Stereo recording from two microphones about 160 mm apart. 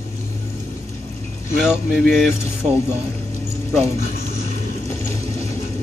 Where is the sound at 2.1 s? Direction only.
Centre (ahead or behind).